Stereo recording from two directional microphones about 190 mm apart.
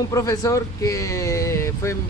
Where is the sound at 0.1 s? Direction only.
15° left (ahead or behind).